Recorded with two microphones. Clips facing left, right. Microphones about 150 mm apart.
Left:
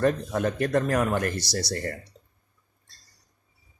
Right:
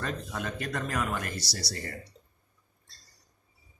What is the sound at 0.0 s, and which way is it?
Speech, 55° left (ahead or behind).